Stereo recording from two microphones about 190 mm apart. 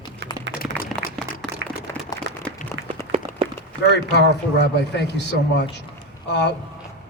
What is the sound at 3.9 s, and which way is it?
A man's voice, 65° left (ahead or behind).